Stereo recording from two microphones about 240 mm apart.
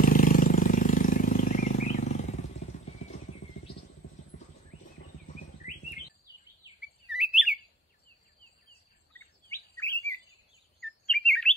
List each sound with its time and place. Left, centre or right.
0.0 s vehicle: left
7.1 s chirp: centre
9.1 s bird vocalization: centre
9.5 s chirp: centre